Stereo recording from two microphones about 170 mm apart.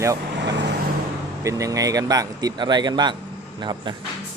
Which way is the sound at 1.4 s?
20° right (ahead or behind).